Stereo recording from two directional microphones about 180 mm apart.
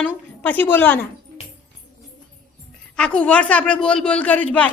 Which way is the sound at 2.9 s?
5° left (ahead or behind).